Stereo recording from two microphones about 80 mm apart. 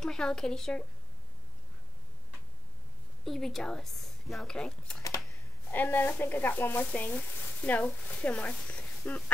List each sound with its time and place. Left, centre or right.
0.0 s speech: centre
3.3 s speech: centre
5.7 s speech: left